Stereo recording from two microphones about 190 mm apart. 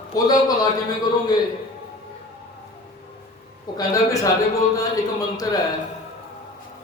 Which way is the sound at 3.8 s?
15° left (ahead or behind).